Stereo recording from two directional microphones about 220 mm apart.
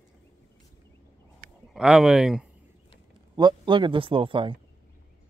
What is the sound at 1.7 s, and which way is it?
Speech, centre (ahead or behind).